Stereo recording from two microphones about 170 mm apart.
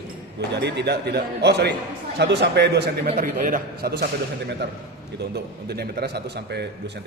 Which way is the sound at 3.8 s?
65° right (ahead or behind).